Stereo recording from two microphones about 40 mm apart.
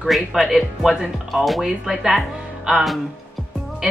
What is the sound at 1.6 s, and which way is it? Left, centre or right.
Speech, centre.